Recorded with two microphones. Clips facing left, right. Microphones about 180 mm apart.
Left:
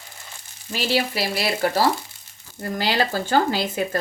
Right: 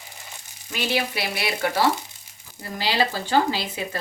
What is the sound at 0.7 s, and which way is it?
Speech, 35° left (ahead or behind).